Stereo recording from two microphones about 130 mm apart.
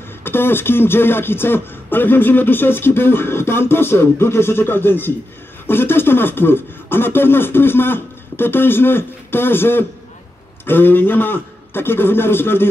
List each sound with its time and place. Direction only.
0.2 s speech: 15° left (ahead or behind)